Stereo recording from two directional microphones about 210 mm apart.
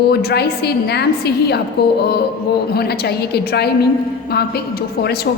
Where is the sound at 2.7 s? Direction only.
50° left (ahead or behind).